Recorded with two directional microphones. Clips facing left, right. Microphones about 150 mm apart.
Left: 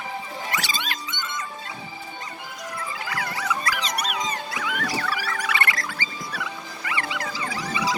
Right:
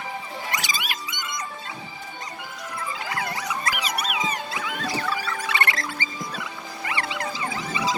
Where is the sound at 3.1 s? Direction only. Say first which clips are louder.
Left 2 dB; 25° right (ahead or behind).